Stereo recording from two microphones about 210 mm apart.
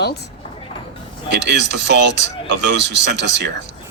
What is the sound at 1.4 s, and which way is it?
Speech, 55° right (ahead or behind).